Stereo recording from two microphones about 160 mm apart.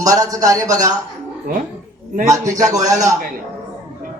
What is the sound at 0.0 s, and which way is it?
Speech, 20° right (ahead or behind).